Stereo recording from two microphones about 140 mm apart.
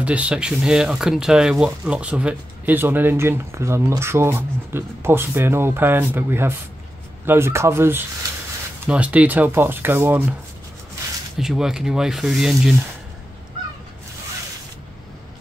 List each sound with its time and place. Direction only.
0.0 s speech: 10° right (ahead or behind)
11.3 s speech: 5° right (ahead or behind)